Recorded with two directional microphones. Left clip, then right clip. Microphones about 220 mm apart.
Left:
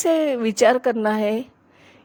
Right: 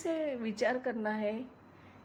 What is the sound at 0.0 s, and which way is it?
Speech, 45° left (ahead or behind).